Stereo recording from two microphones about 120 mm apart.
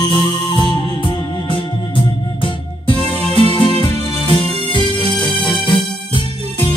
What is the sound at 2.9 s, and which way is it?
Music, 55° right (ahead or behind).